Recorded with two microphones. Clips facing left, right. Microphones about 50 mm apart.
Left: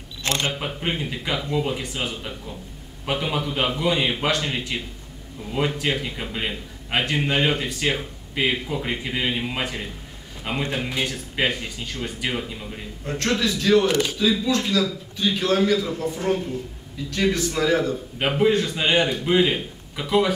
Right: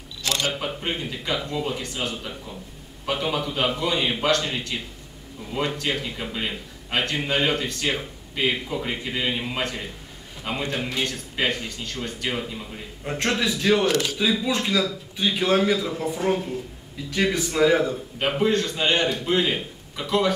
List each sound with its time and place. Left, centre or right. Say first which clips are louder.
0.2 s camera: left 1 dB; left
0.6 s a man's voice: left 1 dB; centre
5.8 s a man's voice: left 2 dB; centre
13.0 s a man's voice: left 1 dB; centre
13.8 s a man's voice: left 1 dB; centre
14.1 s a man's voice: left 2 dB; centre
18.4 s a man's voice: left 3 dB; centre